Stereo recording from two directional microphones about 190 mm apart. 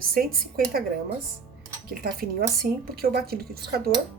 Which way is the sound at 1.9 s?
55° right (ahead or behind).